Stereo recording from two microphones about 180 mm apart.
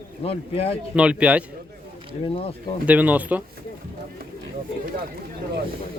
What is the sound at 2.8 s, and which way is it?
Speech, 10° right (ahead or behind).